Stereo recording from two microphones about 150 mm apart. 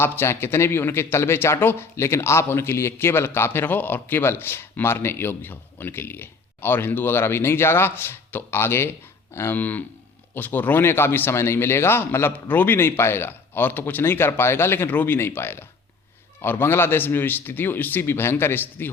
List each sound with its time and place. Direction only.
0.0 s speech: 15° left (ahead or behind)